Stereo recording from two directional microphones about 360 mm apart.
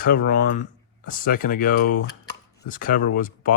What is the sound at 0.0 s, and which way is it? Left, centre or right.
Speech, left.